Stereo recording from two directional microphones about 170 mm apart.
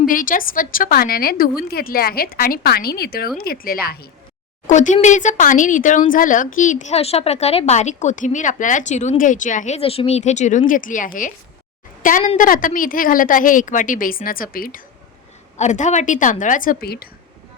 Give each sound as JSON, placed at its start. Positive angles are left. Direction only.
{"t": 0.0, "sound": "a woman's voice", "side_deg": 55}
{"t": 4.6, "sound": "a woman's voice", "side_deg": 45}
{"t": 15.5, "sound": "speech", "side_deg": 45}